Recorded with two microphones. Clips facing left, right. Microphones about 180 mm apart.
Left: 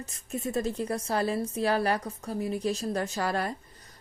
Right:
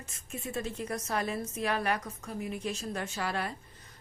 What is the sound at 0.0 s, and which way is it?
A woman's voice, 35° left (ahead or behind).